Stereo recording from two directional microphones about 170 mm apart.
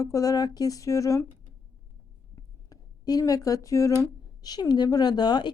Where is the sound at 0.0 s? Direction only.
20° left (ahead or behind).